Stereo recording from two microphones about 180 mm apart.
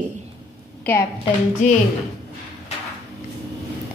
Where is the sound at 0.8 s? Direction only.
10° left (ahead or behind).